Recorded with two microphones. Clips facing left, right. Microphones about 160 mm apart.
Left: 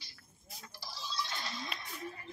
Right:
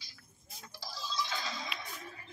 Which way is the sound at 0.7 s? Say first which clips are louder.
Right 2 dB; 90° right.